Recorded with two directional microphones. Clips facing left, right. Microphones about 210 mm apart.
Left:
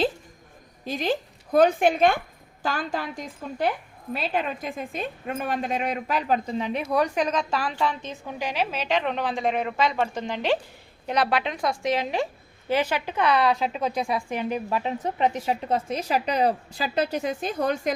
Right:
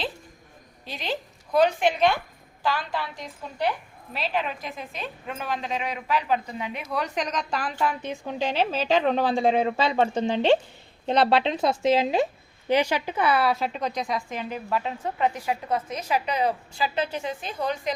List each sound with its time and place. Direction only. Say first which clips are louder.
0.9 s a woman's voice: left 6 dB; 50° left (ahead or behind)
7.8 s a woman's voice: even; 15° right (ahead or behind); by 17.9 s 50° left (ahead or behind)